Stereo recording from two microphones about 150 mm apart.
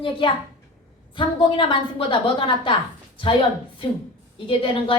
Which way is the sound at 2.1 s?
35° left (ahead or behind).